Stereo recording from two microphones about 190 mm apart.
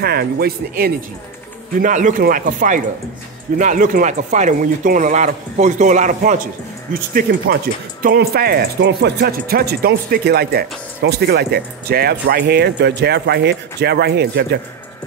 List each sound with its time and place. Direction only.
0.0 s speech: 55° right (ahead or behind)
1.8 s speech: 40° right (ahead or behind); by 14.6 s 60° right (ahead or behind)